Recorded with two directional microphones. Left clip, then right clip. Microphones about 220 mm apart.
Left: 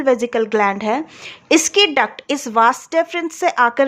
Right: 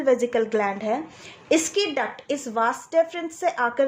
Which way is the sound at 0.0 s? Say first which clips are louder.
Left 4 dB; 25° left (ahead or behind).